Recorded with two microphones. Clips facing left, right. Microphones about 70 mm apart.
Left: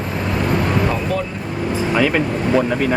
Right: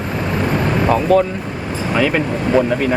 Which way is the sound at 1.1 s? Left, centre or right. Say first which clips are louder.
Right 9 dB; right.